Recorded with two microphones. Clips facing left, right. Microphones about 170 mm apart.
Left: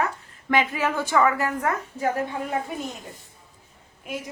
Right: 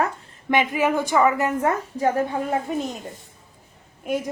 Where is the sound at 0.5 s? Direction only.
15° right (ahead or behind); by 2.6 s 30° right (ahead or behind).